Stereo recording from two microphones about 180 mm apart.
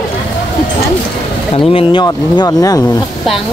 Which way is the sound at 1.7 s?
25° left (ahead or behind).